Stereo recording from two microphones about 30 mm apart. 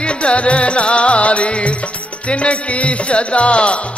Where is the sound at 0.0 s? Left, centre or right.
Left.